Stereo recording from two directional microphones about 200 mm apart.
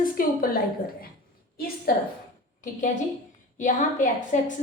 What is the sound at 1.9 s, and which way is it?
Speech, 45° left (ahead or behind).